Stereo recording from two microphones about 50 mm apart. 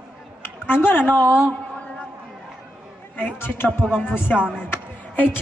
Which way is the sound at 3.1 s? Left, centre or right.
Left.